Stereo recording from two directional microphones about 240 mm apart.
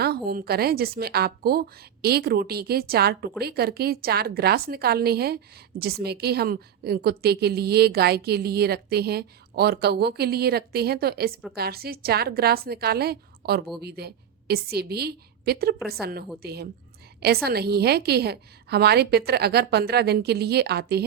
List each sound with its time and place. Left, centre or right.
0.0 s a woman's voice: right